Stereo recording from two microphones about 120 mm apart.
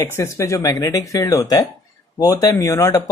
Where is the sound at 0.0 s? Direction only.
25° left (ahead or behind).